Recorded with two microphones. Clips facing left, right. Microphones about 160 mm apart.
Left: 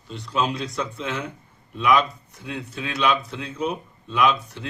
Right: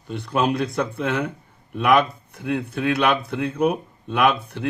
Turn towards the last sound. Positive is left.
turn(degrees=-55)  # may be behind; listen again after turning